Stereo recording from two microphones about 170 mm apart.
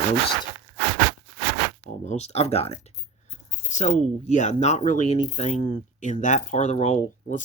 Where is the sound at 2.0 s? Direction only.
40° left (ahead or behind).